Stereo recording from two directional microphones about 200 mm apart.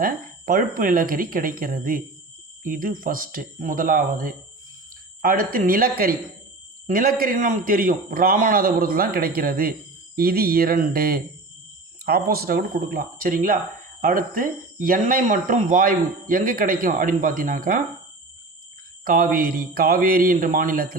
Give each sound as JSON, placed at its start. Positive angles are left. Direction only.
{"t": 0.0, "sound": "speech", "side_deg": -45}
{"t": 19.0, "sound": "speech", "side_deg": -45}